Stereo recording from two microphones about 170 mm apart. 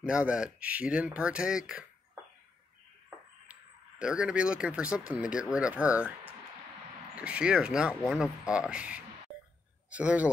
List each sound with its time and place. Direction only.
0.0 s speech: 5° right (ahead or behind)
4.0 s speech: 5° right (ahead or behind)
7.2 s a man's voice: 5° right (ahead or behind)